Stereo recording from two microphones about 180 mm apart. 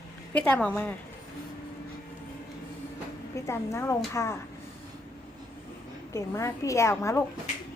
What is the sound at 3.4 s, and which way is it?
Speech, 15° left (ahead or behind).